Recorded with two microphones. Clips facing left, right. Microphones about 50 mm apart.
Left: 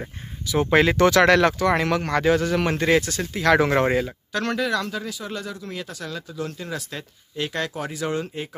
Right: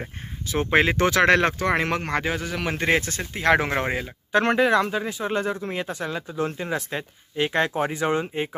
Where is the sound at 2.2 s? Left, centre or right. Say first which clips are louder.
Left 7 dB; centre.